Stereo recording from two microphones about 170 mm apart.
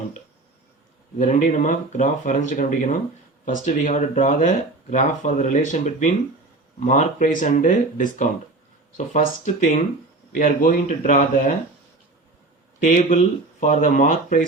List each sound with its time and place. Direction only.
1.2 s speech: 45° left (ahead or behind)
12.8 s speech: 50° left (ahead or behind)